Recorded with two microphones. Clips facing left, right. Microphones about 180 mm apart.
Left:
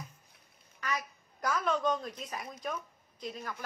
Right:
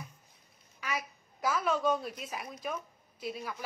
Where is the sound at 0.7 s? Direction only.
10° right (ahead or behind).